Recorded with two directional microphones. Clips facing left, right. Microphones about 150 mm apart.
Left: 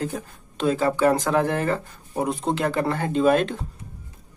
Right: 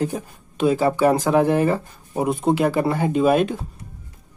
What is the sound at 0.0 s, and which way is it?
Speech, 15° right (ahead or behind).